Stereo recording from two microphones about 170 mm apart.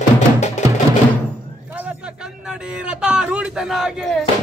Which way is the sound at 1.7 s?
10° right (ahead or behind).